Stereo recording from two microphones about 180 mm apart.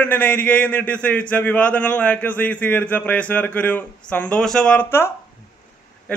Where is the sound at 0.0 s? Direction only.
10° left (ahead or behind).